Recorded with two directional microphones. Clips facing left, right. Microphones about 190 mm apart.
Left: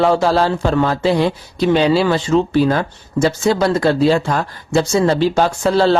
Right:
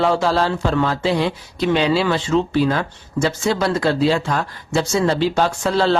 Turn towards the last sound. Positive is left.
turn(degrees=40)  # may be behind; listen again after turning